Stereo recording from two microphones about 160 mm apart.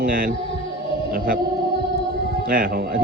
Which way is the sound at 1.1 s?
65° right (ahead or behind).